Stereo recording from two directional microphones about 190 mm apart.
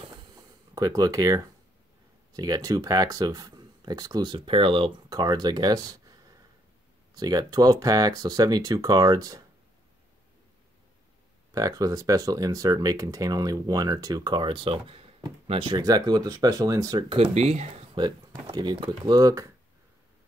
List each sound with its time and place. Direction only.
0.7 s speech: 20° right (ahead or behind)
11.5 s speech: 20° right (ahead or behind)
17.2 s speech: 35° right (ahead or behind)
17.9 s speech: 25° right (ahead or behind)